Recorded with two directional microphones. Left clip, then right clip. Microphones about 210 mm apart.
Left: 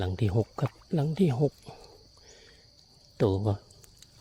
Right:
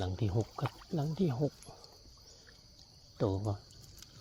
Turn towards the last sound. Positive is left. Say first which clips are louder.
# left 7 dB
turn(degrees=50)  # may be behind; listen again after turning